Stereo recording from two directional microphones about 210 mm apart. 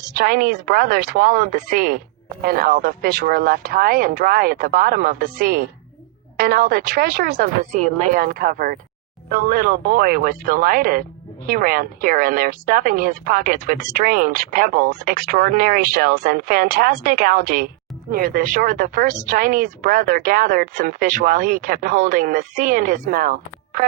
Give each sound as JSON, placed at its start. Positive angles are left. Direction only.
{"t": 0.2, "sound": "speech", "side_deg": -45}